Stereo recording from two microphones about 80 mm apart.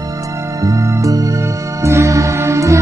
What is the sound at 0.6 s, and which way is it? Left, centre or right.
Music, right.